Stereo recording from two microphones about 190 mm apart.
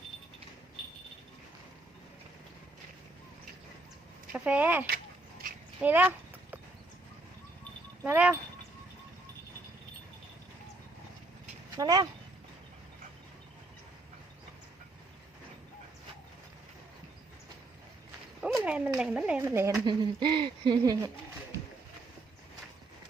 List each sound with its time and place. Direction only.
4.3 s speech: 5° right (ahead or behind)
5.8 s clip-clop: 10° right (ahead or behind)
8.0 s speech: 10° right (ahead or behind)
11.8 s speech: 20° right (ahead or behind)
18.4 s speech: 5° right (ahead or behind)
19.8 s speech: 25° right (ahead or behind)